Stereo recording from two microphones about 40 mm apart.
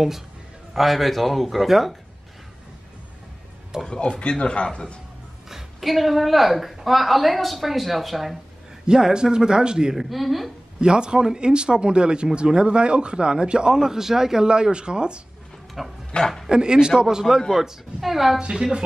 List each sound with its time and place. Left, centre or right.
0.7 s a woman's voice: centre
3.8 s speech: centre
5.5 s a woman's voice: centre
8.8 s speech: centre
9.9 s a woman's voice: centre
10.8 s speech: right
13.7 s speech: centre
15.8 s a woman's voice: centre
16.1 s speech: left
16.4 s a man's voice: centre
18.4 s speech: right